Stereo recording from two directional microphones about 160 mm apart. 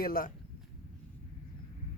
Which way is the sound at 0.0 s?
65° left (ahead or behind).